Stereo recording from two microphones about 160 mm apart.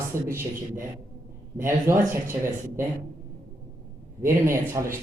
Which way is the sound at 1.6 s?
15° right (ahead or behind).